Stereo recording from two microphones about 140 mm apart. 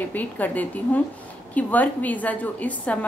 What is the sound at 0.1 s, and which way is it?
A woman's voice, 10° left (ahead or behind).